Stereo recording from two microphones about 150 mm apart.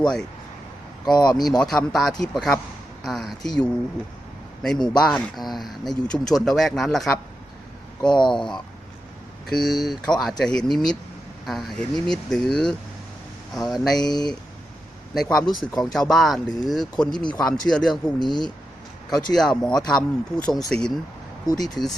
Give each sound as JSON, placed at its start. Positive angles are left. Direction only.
{"t": 1.1, "sound": "speech", "side_deg": 30}
{"t": 1.5, "sound": "speech", "side_deg": 5}
{"t": 8.1, "sound": "speech", "side_deg": 30}
{"t": 8.4, "sound": "speech", "side_deg": 5}
{"t": 12.0, "sound": "speech", "side_deg": 5}
{"t": 14.0, "sound": "speech", "side_deg": 25}
{"t": 15.1, "sound": "speech", "side_deg": 5}
{"t": 18.2, "sound": "speech", "side_deg": 30}
{"t": 19.1, "sound": "speech", "side_deg": 5}
{"t": 21.5, "sound": "speech", "side_deg": 25}